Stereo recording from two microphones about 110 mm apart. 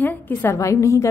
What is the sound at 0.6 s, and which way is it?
Speech, 30° left (ahead or behind).